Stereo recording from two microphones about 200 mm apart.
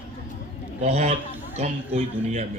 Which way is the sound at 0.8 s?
35° right (ahead or behind).